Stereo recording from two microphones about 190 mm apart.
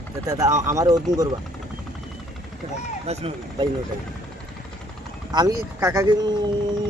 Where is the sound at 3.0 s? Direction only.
35° right (ahead or behind).